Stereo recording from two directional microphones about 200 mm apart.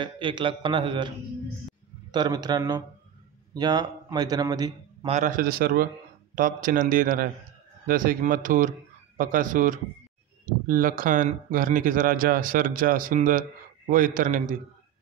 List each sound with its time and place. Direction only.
0.0 s speech: 25° right (ahead or behind)
2.1 s a man's voice: 20° right (ahead or behind)
5.1 s speech: 40° right (ahead or behind)